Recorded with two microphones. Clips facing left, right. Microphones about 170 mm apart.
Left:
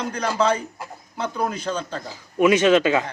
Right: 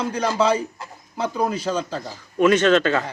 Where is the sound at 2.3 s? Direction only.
10° left (ahead or behind).